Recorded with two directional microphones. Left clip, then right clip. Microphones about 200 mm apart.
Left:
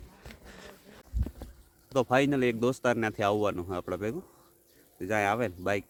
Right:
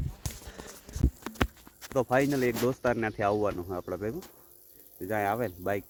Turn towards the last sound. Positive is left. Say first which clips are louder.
# left 1 dB
turn(degrees=10)  # may be behind; listen again after turning